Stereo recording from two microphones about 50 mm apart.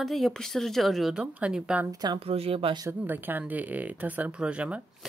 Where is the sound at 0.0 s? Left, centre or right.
Centre.